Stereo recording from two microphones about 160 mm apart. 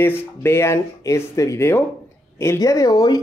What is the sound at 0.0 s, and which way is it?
Speech, 15° left (ahead or behind).